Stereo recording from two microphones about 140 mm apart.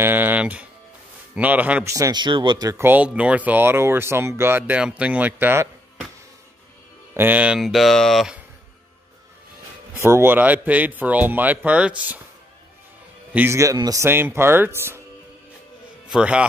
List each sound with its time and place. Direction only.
0.0 s music: 15° right (ahead or behind)
1.3 s speech: 10° right (ahead or behind)
1.9 s speech: 25° right (ahead or behind)
2.8 s speech: 10° right (ahead or behind)
7.2 s speech: 10° right (ahead or behind)
9.9 s speech: 20° right (ahead or behind)
13.3 s speech: 15° right (ahead or behind)
16.1 s speech: 5° right (ahead or behind)